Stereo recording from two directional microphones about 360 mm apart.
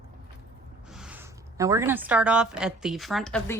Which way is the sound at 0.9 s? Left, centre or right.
Centre.